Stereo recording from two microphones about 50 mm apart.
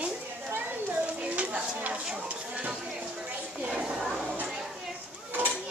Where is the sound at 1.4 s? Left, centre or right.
Right.